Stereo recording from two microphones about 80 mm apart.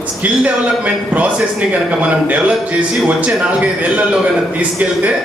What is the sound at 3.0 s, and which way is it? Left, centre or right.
A man's voice, centre.